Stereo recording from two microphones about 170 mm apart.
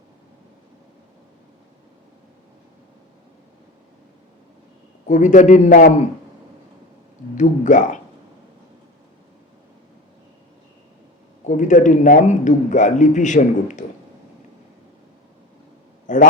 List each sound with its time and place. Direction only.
5.0 s a man's voice: 45° left (ahead or behind)
7.3 s a man's voice: 45° left (ahead or behind)
11.4 s a man's voice: 45° left (ahead or behind)
16.0 s a man's voice: 50° left (ahead or behind)